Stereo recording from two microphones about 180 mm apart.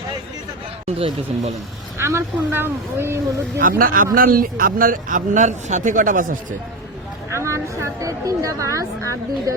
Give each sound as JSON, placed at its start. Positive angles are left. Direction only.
{"t": 0.9, "sound": "speech", "side_deg": -35}
{"t": 2.0, "sound": "speech", "side_deg": -15}
{"t": 3.6, "sound": "a man's voice", "side_deg": -50}
{"t": 7.3, "sound": "speech", "side_deg": -15}